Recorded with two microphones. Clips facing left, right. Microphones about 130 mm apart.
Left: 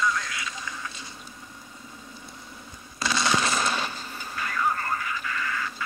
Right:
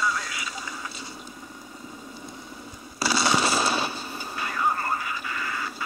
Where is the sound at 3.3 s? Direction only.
30° right (ahead or behind).